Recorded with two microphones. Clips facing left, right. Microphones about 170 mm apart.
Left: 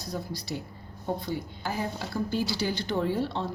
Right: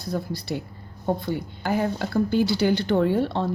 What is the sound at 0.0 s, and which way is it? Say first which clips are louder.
A woman's voice: right 6 dB; 60° right (ahead or behind).